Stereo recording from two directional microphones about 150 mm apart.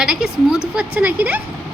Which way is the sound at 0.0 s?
5° right (ahead or behind).